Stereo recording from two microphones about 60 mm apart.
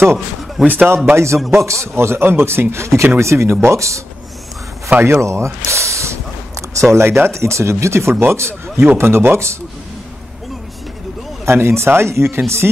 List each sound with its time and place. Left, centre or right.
0.6 s a man's voice: centre
1.1 s speech: right
4.9 s speech: right
5.2 s a sound: right
6.7 s speech: right
11.4 s speech: right